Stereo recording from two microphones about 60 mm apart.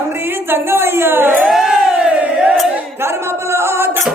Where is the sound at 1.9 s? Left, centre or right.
Right.